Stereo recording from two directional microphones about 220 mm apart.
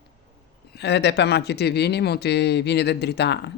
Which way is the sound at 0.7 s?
50° left (ahead or behind).